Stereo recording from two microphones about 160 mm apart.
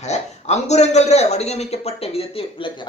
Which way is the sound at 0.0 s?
45° left (ahead or behind).